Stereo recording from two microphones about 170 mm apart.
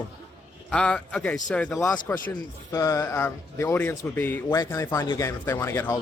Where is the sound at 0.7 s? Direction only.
5° left (ahead or behind).